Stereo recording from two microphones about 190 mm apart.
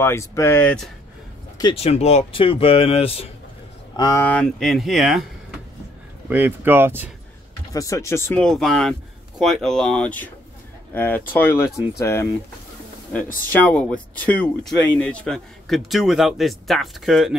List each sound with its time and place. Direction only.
0.0 s speech: 15° left (ahead or behind)
1.6 s speech: 30° left (ahead or behind)
3.9 s speech: 20° left (ahead or behind); by 5.2 s centre (ahead or behind)
6.2 s speech: 10° right (ahead or behind)
7.7 s speech: 15° left (ahead or behind)
13.5 s speech: 10° left (ahead or behind)